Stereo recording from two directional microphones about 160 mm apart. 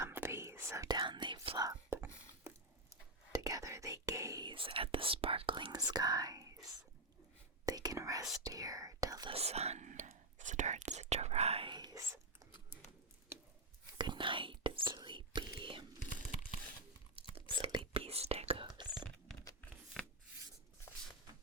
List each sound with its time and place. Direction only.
0.0 s whispering: 15° right (ahead or behind)
3.3 s whispering: 20° right (ahead or behind)
9.3 s whispering: 40° right (ahead or behind); by 12.2 s 20° right (ahead or behind)
14.0 s whispering: 30° right (ahead or behind)
16.3 s crumpling: 35° left (ahead or behind)
17.5 s whispering: 30° right (ahead or behind)
20.0 s writing: 10° left (ahead or behind)